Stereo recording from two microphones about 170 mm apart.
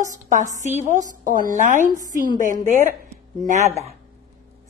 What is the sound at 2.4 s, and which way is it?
Speech, 45° right (ahead or behind).